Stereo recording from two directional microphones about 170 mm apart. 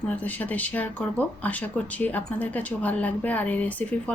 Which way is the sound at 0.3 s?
10° left (ahead or behind).